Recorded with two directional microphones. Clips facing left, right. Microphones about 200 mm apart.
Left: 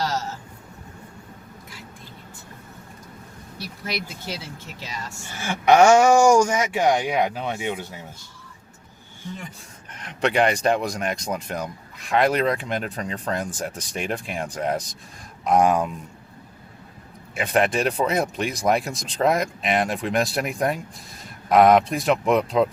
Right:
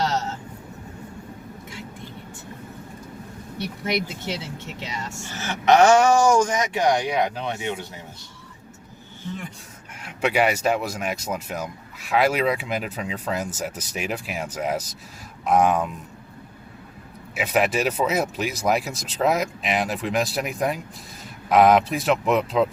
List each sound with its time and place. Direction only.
0.0 s a sound: 25° right (ahead or behind)
3.6 s speech: 25° right (ahead or behind)
5.3 s speech: 10° left (ahead or behind)
9.9 s speech: 10° right (ahead or behind)
17.3 s speech: 5° right (ahead or behind)